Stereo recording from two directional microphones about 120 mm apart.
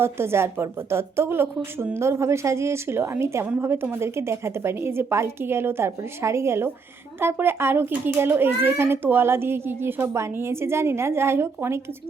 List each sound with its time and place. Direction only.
0.0 s a child's voice: 20° right (ahead or behind)